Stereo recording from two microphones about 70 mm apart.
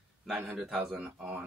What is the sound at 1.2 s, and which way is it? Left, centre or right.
Speech, centre.